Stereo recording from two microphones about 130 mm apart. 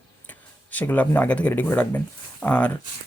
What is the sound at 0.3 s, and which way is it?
Speech, 15° left (ahead or behind).